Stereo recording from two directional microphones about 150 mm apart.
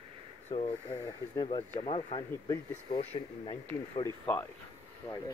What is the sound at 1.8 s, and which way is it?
Speech, 40° left (ahead or behind).